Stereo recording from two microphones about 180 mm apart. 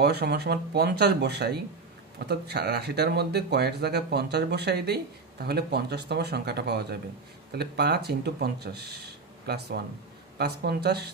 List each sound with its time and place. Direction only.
0.0 s speech: 65° right (ahead or behind)